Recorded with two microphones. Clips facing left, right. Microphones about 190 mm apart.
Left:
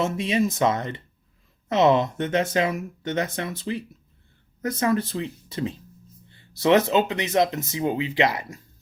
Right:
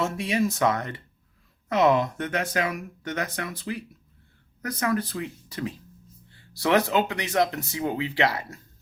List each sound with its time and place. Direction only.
0.0 s speech: 20° left (ahead or behind)